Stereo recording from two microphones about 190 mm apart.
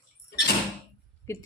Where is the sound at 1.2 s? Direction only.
15° left (ahead or behind).